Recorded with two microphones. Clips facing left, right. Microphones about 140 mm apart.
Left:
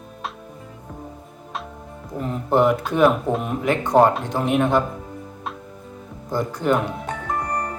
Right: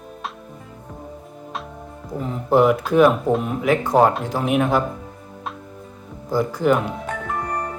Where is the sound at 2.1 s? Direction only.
Centre (ahead or behind).